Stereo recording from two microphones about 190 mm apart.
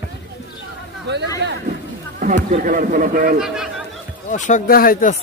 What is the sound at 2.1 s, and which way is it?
Speech, 45° right (ahead or behind).